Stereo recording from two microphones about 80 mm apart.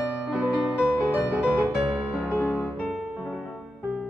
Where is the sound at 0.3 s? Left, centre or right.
Centre.